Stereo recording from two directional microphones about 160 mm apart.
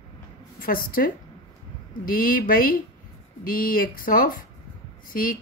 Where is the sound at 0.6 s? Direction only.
65° left (ahead or behind).